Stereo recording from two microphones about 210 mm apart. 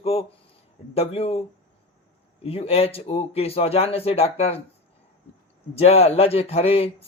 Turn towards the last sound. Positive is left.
turn(degrees=30)  # may be behind; listen again after turning